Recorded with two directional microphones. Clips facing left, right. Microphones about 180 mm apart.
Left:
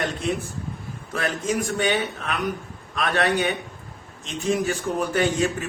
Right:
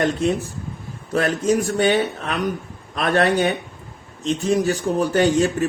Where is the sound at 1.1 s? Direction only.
40° right (ahead or behind).